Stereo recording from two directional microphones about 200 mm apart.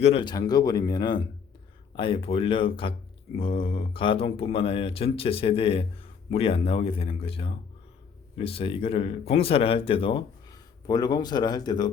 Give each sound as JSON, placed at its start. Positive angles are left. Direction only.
{"t": 0.0, "sound": "speech", "side_deg": 25}